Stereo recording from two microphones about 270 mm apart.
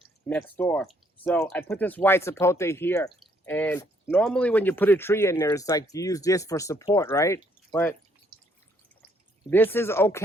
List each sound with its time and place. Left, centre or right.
0.3 s speech: centre
9.5 s speech: centre